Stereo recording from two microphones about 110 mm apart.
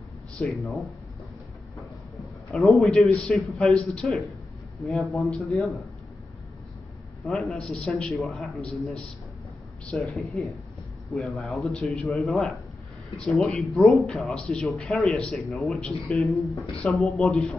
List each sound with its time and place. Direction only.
0.4 s a man's voice: centre (ahead or behind)
1.8 s a sound: centre (ahead or behind)
3.2 s a man's voice: centre (ahead or behind)
7.2 s a man's voice: 5° left (ahead or behind)
9.9 s a man's voice: centre (ahead or behind)